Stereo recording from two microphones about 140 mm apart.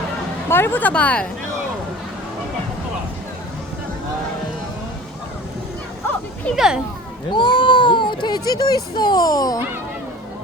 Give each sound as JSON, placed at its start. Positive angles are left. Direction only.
{"t": 0.4, "sound": "a woman's voice", "side_deg": 15}
{"t": 6.6, "sound": "a child's voice", "side_deg": -5}
{"t": 7.3, "sound": "speech", "side_deg": 35}